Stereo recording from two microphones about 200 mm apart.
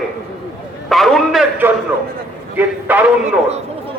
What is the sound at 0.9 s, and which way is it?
A man's voice, centre (ahead or behind).